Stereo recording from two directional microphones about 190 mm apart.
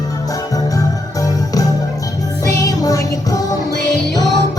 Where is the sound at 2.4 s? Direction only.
20° left (ahead or behind).